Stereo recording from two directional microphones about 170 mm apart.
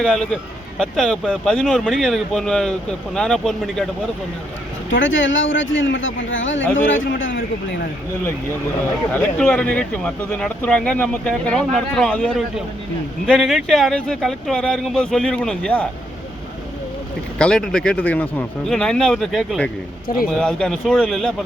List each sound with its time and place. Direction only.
0.0 s speech: centre (ahead or behind)
4.9 s speech: 90° left
9.1 s speech: 5° left (ahead or behind)
17.3 s speech: 5° left (ahead or behind)